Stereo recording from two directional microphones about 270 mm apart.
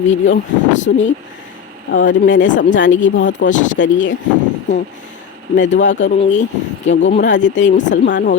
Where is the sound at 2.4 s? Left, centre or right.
Left.